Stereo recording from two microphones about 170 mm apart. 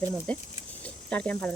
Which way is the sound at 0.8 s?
5° left (ahead or behind).